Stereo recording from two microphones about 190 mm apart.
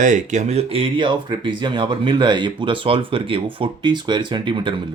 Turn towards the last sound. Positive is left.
turn(degrees=-25)  # may be behind; listen again after turning